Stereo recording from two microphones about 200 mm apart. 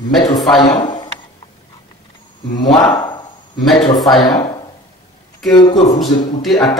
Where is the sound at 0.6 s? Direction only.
25° left (ahead or behind).